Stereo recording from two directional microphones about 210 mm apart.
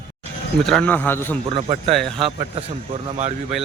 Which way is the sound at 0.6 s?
5° left (ahead or behind).